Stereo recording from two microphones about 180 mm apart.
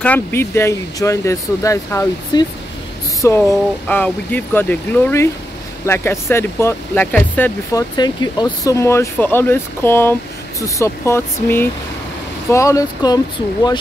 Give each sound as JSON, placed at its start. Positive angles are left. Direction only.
{"t": 0.0, "sound": "speech", "side_deg": 10}
{"t": 8.0, "sound": "speech", "side_deg": 25}